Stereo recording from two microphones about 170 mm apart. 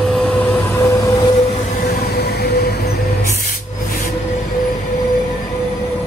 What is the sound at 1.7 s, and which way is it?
Music, 60° left (ahead or behind).